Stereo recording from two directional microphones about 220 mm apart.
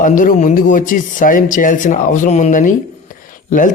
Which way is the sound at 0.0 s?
35° left (ahead or behind).